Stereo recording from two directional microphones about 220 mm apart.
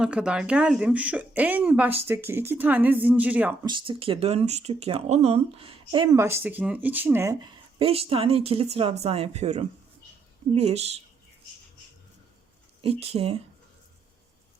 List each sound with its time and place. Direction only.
0.0 s speech: 5° right (ahead or behind)
3.7 s speech: 25° right (ahead or behind)
7.8 s speech: 25° right (ahead or behind)
12.8 s speech: 25° right (ahead or behind)